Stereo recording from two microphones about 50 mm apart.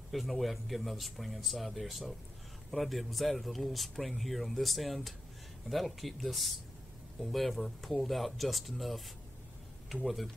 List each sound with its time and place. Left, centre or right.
0.1 s speech: centre
10.0 s speech: centre